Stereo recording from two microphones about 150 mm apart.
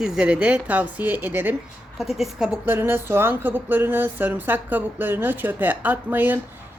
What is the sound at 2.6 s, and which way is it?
Speech, 15° right (ahead or behind).